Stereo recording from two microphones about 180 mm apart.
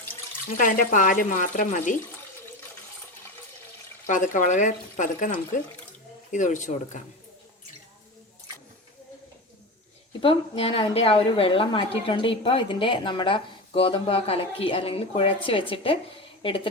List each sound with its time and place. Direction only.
0.5 s speech: 50° left (ahead or behind)
4.0 s speech: 45° left (ahead or behind)
10.1 s a woman's voice: 30° left (ahead or behind)